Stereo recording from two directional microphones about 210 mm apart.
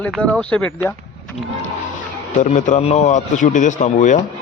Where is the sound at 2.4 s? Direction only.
35° left (ahead or behind).